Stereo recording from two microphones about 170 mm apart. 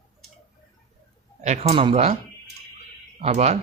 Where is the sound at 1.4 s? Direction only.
40° right (ahead or behind).